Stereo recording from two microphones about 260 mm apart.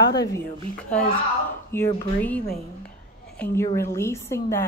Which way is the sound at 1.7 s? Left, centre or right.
Centre.